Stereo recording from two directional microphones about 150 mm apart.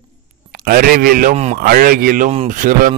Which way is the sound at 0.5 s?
70° right (ahead or behind).